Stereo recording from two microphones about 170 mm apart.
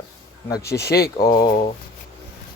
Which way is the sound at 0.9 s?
65° left (ahead or behind).